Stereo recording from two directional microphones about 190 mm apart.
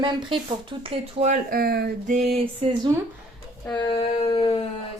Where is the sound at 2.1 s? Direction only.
35° right (ahead or behind).